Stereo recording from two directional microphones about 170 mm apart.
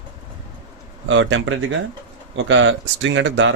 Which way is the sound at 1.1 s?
90° right.